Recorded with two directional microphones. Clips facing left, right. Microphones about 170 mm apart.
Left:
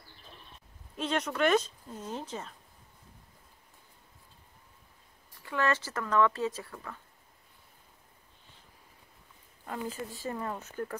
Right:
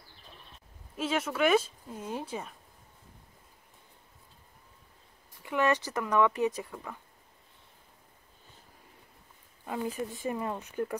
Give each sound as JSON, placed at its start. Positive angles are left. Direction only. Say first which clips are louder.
{"t": 0.9, "sound": "speech", "louder": "right 1 dB", "side_deg": -5}
{"t": 5.4, "sound": "speech", "louder": "right 3 dB", "side_deg": -15}
{"t": 9.7, "sound": "speech", "louder": "right 3 dB", "side_deg": -15}